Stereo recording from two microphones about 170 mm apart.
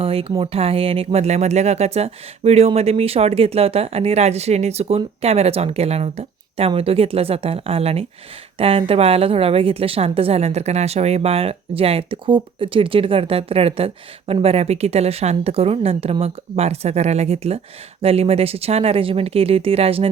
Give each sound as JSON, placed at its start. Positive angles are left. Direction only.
{"t": 0.0, "sound": "a woman's voice", "side_deg": -35}